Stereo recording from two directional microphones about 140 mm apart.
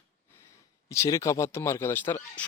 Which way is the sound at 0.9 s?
20° left (ahead or behind).